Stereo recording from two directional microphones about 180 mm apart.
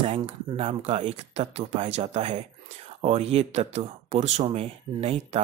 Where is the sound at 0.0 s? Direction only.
30° right (ahead or behind).